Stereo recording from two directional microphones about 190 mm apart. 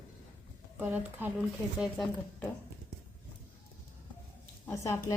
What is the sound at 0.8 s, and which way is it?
A woman's voice, 10° right (ahead or behind).